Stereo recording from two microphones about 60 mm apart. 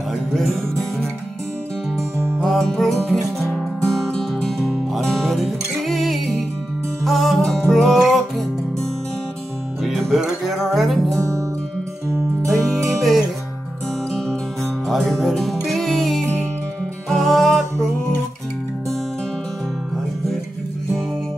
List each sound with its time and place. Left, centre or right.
0.1 s music: centre
2.3 s music: centre
3.5 s music: centre
9.8 s music: centre
11.1 s music: right
12.4 s music: centre
14.9 s music: centre